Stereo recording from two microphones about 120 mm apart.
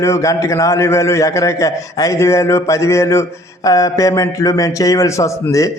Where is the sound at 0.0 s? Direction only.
25° left (ahead or behind).